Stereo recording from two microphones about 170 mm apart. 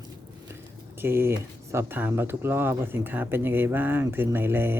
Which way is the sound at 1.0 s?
15° right (ahead or behind).